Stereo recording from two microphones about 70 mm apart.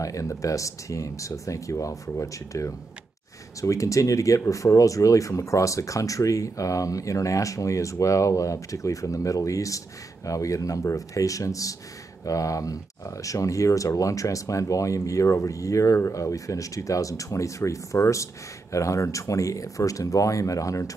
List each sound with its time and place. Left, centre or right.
0.0 s speech: left